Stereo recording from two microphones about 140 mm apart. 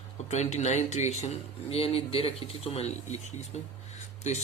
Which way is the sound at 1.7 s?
45° left (ahead or behind).